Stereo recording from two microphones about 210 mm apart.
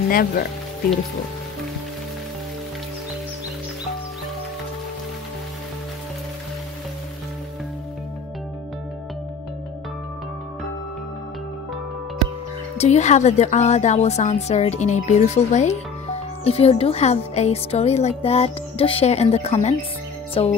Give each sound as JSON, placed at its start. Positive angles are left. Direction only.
{"t": 0.1, "sound": "speech", "side_deg": 45}
{"t": 12.7, "sound": "a woman's voice", "side_deg": 30}
{"t": 20.4, "sound": "music", "side_deg": 25}